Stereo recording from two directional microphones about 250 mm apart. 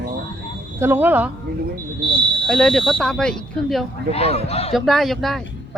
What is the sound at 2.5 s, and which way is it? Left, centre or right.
Speech, centre.